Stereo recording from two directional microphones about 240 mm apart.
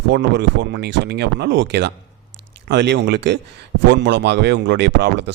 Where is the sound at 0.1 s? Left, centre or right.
Right.